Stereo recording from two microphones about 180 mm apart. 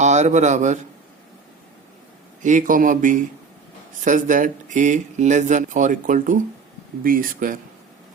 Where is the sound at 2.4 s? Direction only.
45° right (ahead or behind).